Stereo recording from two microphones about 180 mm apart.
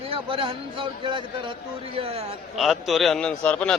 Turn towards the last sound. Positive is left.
turn(degrees=5)  # may be behind; listen again after turning